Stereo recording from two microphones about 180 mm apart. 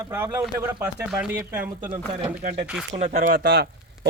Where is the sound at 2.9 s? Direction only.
50° right (ahead or behind).